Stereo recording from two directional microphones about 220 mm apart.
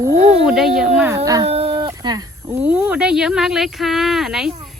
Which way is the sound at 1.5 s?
25° right (ahead or behind).